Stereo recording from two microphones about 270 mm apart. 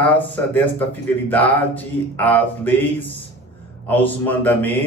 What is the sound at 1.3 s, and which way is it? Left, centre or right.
Speech, centre.